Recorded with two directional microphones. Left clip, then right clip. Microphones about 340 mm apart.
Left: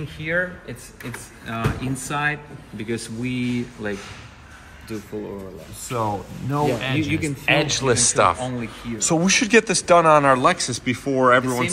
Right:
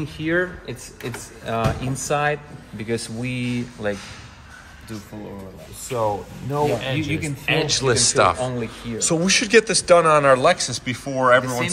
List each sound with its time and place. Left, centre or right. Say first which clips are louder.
0.2 s speech: right 1 dB; right
5.9 s speech: right 2 dB; centre
8.4 s speech: right 3 dB; right
8.9 s a man's voice: even; centre